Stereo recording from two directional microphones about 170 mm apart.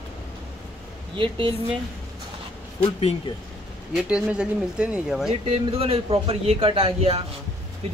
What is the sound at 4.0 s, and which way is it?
Speech, 5° right (ahead or behind).